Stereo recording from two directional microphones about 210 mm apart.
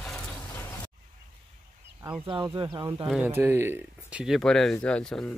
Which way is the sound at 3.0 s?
5° right (ahead or behind).